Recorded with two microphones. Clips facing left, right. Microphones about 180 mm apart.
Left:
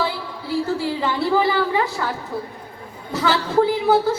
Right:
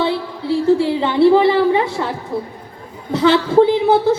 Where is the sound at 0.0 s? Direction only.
25° right (ahead or behind).